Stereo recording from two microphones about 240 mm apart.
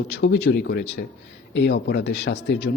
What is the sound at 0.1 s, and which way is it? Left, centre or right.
Speech, left.